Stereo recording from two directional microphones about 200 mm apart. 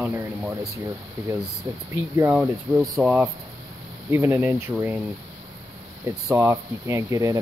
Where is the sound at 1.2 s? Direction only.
15° right (ahead or behind).